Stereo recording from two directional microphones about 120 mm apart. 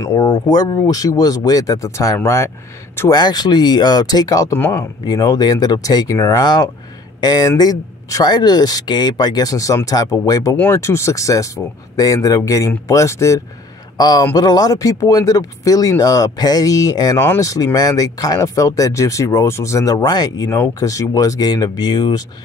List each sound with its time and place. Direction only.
0.0 s speech: 30° left (ahead or behind)
3.1 s speech: 35° left (ahead or behind)
4.6 s speech: 15° left (ahead or behind)
5.0 s speech: 30° left (ahead or behind)
10.5 s a man's voice: 15° left (ahead or behind); by 22.2 s 35° left (ahead or behind)